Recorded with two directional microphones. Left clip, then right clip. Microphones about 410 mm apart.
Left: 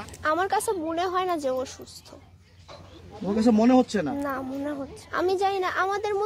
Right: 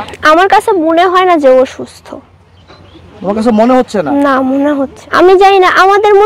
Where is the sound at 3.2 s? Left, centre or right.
Centre.